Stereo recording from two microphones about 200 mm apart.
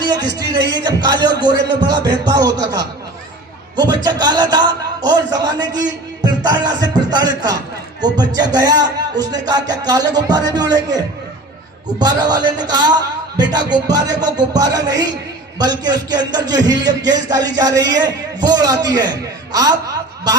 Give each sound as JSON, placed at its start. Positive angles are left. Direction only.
{"t": 0.1, "sound": "a man's voice", "side_deg": -20}